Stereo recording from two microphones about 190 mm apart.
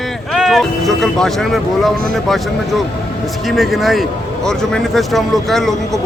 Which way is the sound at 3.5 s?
Centre (ahead or behind).